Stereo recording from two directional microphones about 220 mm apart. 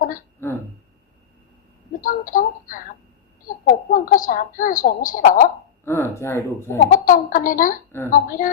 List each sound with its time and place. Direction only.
0.4 s a sound: 10° left (ahead or behind)
2.0 s speech: 40° left (ahead or behind)
3.5 s a sound: 40° left (ahead or behind)
3.9 s a woman's voice: 40° left (ahead or behind)
5.8 s speech: 10° left (ahead or behind)
6.7 s a woman's voice: 40° left (ahead or behind)